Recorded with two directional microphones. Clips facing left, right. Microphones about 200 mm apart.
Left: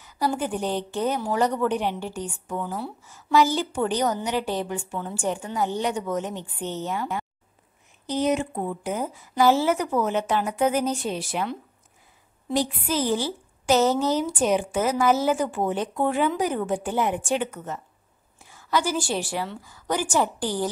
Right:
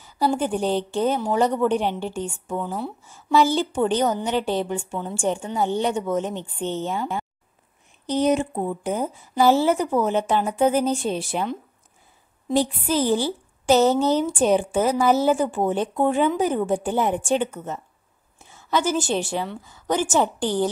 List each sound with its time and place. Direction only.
0.0 s a woman's voice: 25° right (ahead or behind)
13.1 s a woman's voice: 30° right (ahead or behind)